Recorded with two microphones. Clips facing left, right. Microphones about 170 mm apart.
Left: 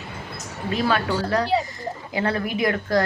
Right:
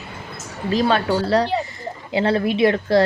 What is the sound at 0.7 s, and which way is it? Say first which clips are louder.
Speech: right 4 dB; 30° right (ahead or behind).